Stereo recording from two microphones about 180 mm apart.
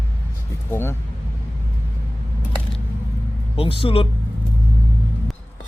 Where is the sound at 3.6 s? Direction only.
30° left (ahead or behind).